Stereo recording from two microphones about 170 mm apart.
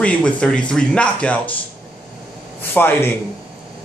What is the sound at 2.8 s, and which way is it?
Speech, 10° left (ahead or behind).